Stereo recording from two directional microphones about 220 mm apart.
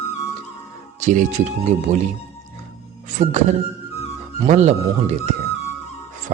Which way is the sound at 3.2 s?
35° right (ahead or behind).